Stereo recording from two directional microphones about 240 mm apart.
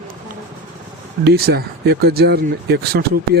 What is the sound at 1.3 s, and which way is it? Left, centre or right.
Speech, right.